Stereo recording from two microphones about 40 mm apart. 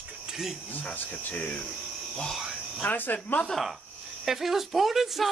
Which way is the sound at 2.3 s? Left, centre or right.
Centre.